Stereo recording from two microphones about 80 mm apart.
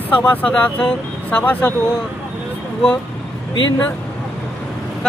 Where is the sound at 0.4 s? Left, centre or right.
Centre.